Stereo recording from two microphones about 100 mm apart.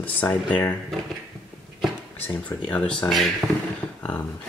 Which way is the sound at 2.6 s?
10° left (ahead or behind).